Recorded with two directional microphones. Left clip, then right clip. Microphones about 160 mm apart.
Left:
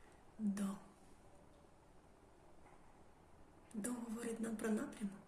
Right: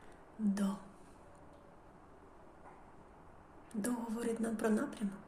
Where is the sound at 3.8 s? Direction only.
20° left (ahead or behind).